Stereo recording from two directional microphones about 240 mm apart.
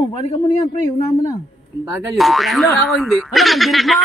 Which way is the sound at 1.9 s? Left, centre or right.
Centre.